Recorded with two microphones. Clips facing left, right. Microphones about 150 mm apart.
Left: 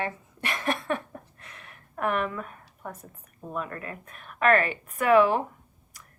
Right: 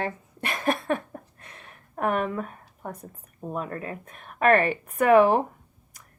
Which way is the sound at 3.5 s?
30° right (ahead or behind).